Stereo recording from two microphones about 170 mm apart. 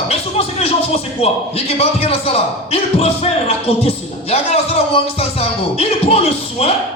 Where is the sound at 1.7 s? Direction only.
35° left (ahead or behind).